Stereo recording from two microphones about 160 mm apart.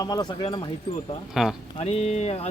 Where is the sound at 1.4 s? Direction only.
5° right (ahead or behind).